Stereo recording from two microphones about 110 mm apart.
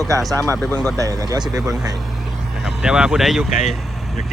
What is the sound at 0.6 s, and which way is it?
Speech, 10° left (ahead or behind).